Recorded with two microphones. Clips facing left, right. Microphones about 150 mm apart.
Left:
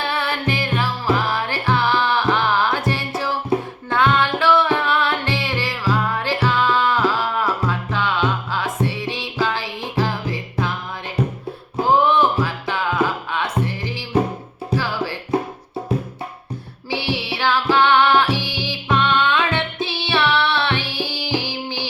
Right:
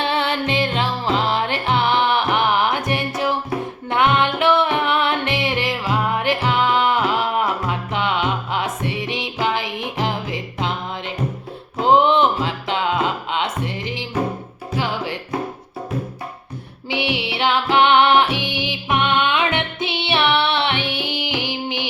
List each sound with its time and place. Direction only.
0.0 s music: 25° right (ahead or behind)
3.5 s music: 25° left (ahead or behind)
3.8 s music: 20° right (ahead or behind)
11.8 s music: 25° right (ahead or behind)
16.9 s music: 20° right (ahead or behind)